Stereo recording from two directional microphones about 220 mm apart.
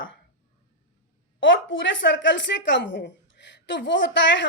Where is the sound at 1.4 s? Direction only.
60° left (ahead or behind).